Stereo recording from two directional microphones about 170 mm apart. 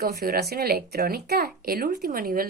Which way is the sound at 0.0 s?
65° right (ahead or behind).